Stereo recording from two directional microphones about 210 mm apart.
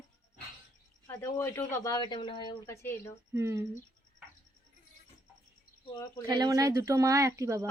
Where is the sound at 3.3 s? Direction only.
15° right (ahead or behind).